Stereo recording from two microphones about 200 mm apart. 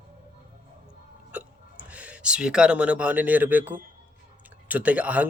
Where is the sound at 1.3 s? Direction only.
5° right (ahead or behind).